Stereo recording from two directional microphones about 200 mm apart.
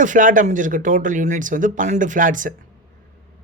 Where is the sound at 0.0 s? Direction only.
40° right (ahead or behind).